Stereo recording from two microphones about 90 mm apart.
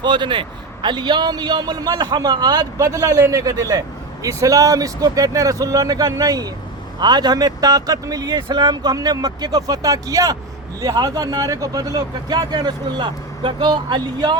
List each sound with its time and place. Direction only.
0.0 s speech: 60° right (ahead or behind)
2.7 s a man's voice: 35° right (ahead or behind); by 14.3 s 55° right (ahead or behind)